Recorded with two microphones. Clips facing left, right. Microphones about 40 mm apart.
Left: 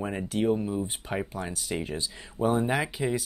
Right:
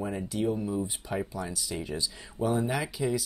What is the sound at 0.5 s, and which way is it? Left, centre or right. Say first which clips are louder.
Speech: left 1 dB; left.